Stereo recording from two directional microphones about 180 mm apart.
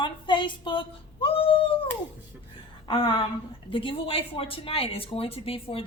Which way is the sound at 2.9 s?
30° left (ahead or behind).